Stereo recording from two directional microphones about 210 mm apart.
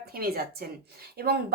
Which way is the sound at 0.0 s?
45° right (ahead or behind).